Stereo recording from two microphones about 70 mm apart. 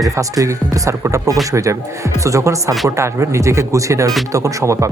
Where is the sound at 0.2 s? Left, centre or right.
Right.